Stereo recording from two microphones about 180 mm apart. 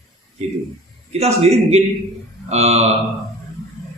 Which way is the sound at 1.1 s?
35° right (ahead or behind).